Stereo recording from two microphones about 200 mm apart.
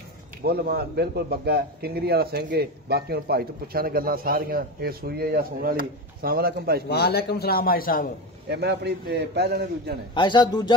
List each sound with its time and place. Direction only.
0.4 s speech: 50° right (ahead or behind)
6.9 s a man's voice: 55° left (ahead or behind)
8.5 s a man's voice: 55° right (ahead or behind)
10.1 s speech: 20° left (ahead or behind)